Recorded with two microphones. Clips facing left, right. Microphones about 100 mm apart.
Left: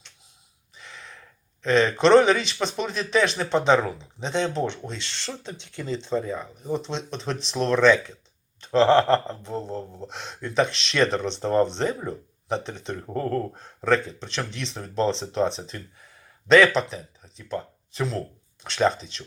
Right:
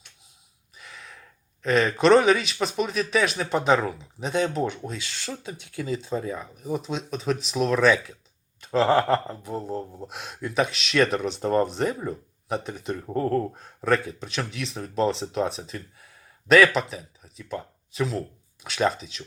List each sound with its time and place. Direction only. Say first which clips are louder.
0.8 s gasp: left 1 dB; 5° right (ahead or behind)
1.6 s speech: even; 5° right (ahead or behind)